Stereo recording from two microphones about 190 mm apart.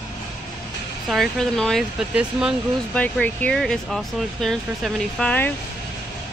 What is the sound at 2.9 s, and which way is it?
Speech, 5° left (ahead or behind).